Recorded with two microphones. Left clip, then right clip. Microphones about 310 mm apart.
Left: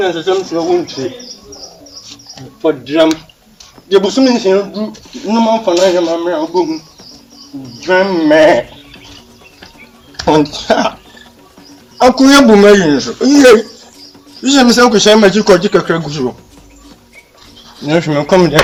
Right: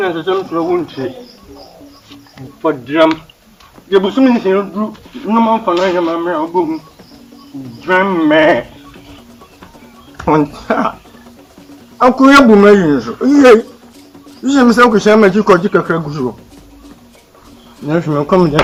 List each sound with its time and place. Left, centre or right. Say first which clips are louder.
0.0 s speech: left 2 dB; left
2.0 s music: left 3 dB; left
3.8 s speech: left 1 dB; left
7.8 s speech: left 1 dB; left
10.2 s speech: left 2 dB; left
12.2 s speech: right 1 dB; left
14.5 s speech: left 1 dB; left
17.8 s speech: left 2 dB; left